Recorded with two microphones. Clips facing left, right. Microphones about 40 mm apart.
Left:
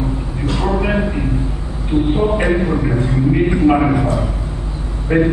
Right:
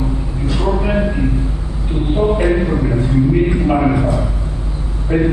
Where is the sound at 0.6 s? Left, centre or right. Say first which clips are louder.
Even; left.